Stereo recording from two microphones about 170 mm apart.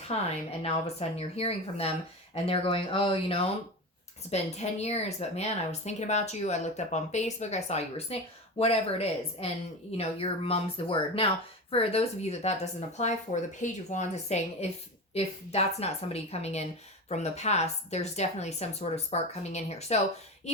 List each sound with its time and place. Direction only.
0.1 s a woman's voice: 35° left (ahead or behind)